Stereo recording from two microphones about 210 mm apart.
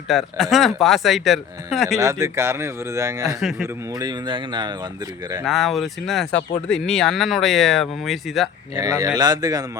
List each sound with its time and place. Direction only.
0.1 s speech: centre (ahead or behind)
2.0 s speech: 15° right (ahead or behind)
5.5 s speech: centre (ahead or behind)
8.7 s speech: 20° right (ahead or behind)